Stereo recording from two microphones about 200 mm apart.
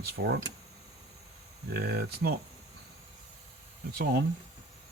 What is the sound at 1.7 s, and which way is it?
Speech, 55° right (ahead or behind).